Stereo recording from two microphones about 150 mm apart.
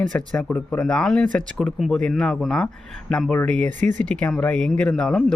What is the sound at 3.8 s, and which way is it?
Speech, 55° right (ahead or behind).